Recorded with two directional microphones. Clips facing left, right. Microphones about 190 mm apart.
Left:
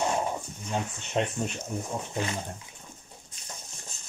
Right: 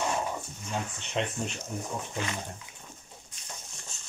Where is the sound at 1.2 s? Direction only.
40° left (ahead or behind).